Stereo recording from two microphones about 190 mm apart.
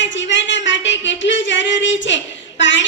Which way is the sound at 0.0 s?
75° left (ahead or behind).